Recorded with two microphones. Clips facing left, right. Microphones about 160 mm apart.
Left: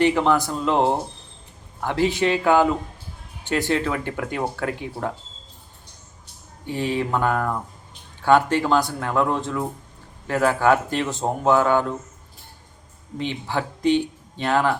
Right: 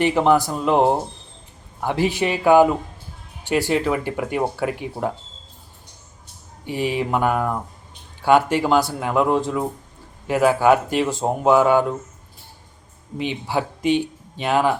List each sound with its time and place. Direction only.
0.0 s speech: 15° right (ahead or behind)
6.7 s speech: 15° right (ahead or behind)
13.1 s speech: 15° right (ahead or behind)